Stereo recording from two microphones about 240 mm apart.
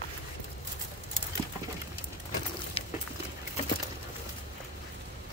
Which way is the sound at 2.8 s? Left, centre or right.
Left.